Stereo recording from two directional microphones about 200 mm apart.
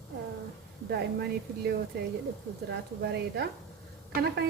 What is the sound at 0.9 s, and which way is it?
Speech, 55° right (ahead or behind).